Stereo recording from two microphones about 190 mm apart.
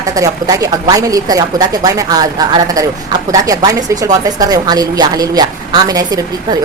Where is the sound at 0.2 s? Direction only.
20° right (ahead or behind).